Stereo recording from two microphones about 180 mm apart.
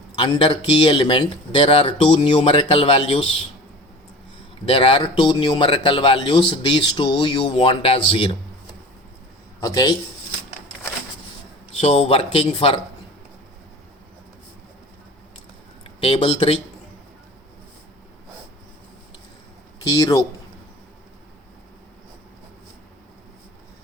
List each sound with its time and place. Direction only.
0.2 s speech: 30° left (ahead or behind)
4.6 s speech: 30° left (ahead or behind)
9.6 s a man's voice: 20° left (ahead or behind)
11.8 s speech: 35° left (ahead or behind)
15.8 s speech: 30° left (ahead or behind)
19.9 s speech: 20° left (ahead or behind)